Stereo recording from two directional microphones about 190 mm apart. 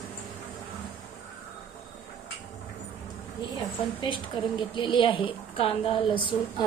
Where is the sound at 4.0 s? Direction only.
25° left (ahead or behind).